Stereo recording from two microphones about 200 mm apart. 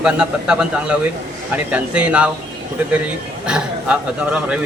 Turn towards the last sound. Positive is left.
turn(degrees=-5)  # may be behind; listen again after turning